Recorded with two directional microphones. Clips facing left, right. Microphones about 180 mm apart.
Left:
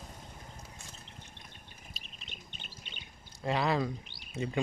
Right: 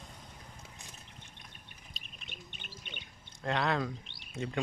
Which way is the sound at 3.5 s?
5° left (ahead or behind).